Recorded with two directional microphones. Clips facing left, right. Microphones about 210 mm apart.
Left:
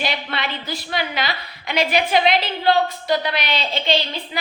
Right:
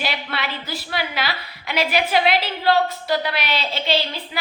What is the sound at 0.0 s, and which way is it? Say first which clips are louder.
A woman's voice: left 1 dB; 5° right (ahead or behind).